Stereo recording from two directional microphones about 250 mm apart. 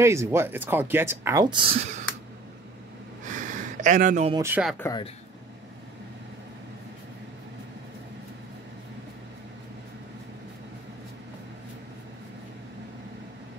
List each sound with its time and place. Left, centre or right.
0.0 s speech: centre
3.3 s a sound: right
4.4 s speech: centre
4.7 s speech: centre